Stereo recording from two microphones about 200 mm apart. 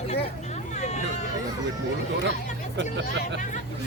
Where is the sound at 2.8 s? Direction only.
65° right (ahead or behind).